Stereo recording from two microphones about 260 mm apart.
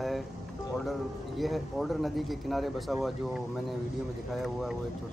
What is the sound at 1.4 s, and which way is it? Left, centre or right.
Speech, centre.